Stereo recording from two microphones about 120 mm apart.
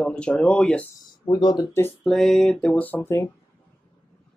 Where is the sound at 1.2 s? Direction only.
40° left (ahead or behind).